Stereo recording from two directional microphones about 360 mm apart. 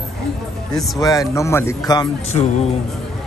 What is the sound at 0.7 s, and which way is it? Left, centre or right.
A man's voice, centre.